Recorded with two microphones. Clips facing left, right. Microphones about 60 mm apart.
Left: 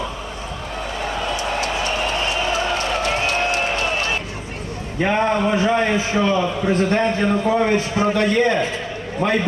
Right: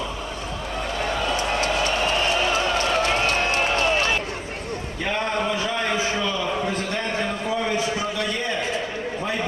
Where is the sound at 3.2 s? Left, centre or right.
Left.